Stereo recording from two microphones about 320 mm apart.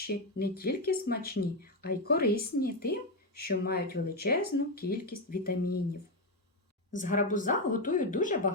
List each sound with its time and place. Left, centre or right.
0.1 s speech: left
6.9 s speech: left